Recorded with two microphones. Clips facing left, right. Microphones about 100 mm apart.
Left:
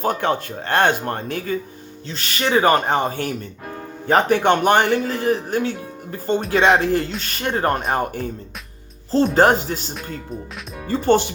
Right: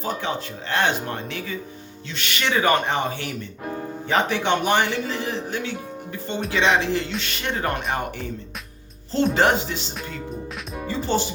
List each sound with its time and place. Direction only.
0.0 s speech: 55° left (ahead or behind)
2.0 s speech: 35° left (ahead or behind)
9.3 s speech: 40° left (ahead or behind); by 11.3 s 60° left (ahead or behind)